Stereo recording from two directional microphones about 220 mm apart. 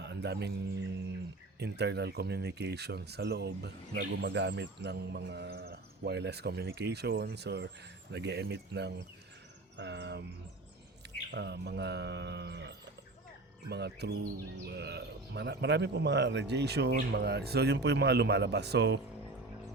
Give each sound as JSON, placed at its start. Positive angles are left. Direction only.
{"t": 0.0, "sound": "music", "side_deg": -50}
{"t": 1.5, "sound": "speech", "side_deg": -50}
{"t": 11.3, "sound": "speech", "side_deg": -50}